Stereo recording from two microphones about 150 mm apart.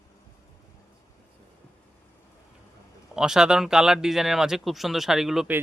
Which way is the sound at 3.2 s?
5° right (ahead or behind).